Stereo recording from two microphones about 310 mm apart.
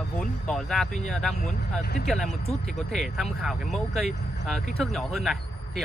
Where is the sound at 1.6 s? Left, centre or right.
Left.